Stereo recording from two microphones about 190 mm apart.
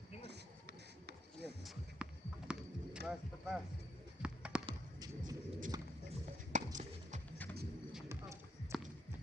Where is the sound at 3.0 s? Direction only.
Centre (ahead or behind).